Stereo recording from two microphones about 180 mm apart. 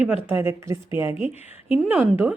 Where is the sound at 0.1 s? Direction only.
15° right (ahead or behind).